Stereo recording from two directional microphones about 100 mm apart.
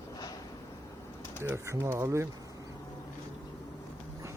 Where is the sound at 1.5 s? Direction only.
30° right (ahead or behind).